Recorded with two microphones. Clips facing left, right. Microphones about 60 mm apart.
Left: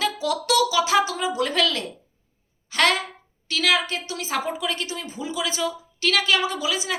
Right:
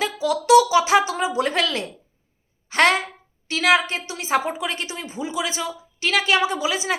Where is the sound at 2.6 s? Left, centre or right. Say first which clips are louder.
Right 3 dB; right.